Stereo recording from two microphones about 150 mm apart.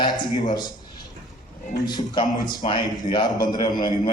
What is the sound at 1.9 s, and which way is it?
A man's voice, 30° left (ahead or behind).